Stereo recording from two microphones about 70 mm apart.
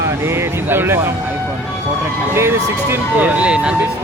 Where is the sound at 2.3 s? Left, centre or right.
Right.